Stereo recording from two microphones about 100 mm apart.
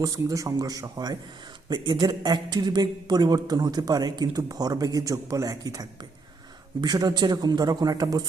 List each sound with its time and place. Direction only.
0.0 s a man's voice: 35° right (ahead or behind)